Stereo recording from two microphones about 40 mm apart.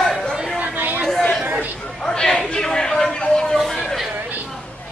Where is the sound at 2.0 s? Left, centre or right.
Centre.